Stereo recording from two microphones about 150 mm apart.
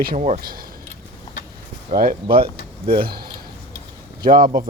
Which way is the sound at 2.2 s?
35° right (ahead or behind).